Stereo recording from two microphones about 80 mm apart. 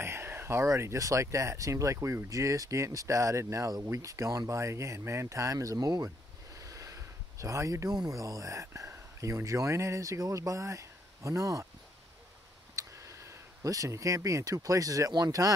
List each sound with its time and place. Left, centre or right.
0.0 s speech: right
12.7 s speech: right